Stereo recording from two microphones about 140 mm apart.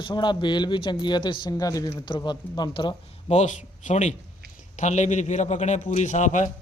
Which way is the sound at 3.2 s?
55° left (ahead or behind).